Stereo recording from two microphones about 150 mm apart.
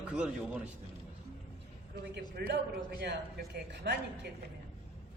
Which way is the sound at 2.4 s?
90° right.